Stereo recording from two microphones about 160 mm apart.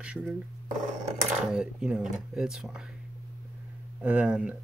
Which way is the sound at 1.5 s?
5° right (ahead or behind).